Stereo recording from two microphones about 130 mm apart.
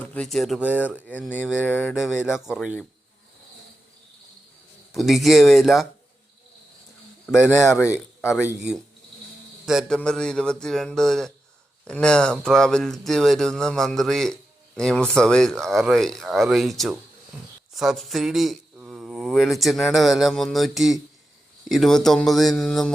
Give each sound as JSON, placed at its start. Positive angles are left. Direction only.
{"t": 0.0, "sound": "speech", "side_deg": 10}
{"t": 0.6, "sound": "speech", "side_deg": -10}
{"t": 1.6, "sound": "a sound", "side_deg": 15}
{"t": 1.9, "sound": "speech", "side_deg": -5}
{"t": 4.9, "sound": "speech", "side_deg": 0}
{"t": 7.3, "sound": "a sound", "side_deg": 10}
{"t": 7.6, "sound": "a man's voice", "side_deg": 20}
{"t": 9.6, "sound": "a man's voice", "side_deg": -5}